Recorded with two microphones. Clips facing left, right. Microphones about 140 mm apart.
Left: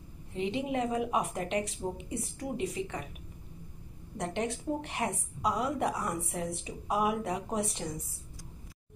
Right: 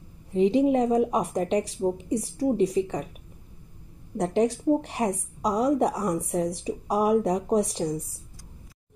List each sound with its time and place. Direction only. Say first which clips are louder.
0.3 s a woman's voice: right 12 dB; 35° right (ahead or behind)
4.2 s a woman's voice: right 10 dB; 35° right (ahead or behind)